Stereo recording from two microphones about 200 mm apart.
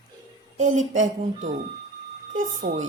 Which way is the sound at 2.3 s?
40° right (ahead or behind).